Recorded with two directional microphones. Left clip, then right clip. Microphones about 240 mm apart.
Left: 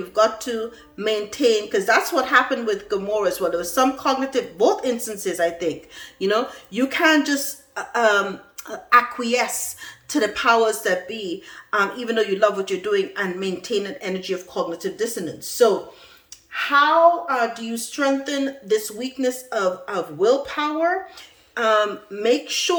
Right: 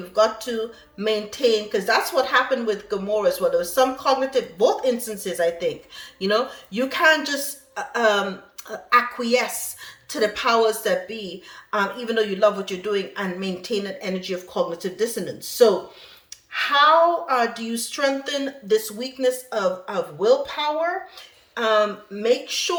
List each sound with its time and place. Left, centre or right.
0.1 s a woman's voice: centre
17.3 s a woman's voice: centre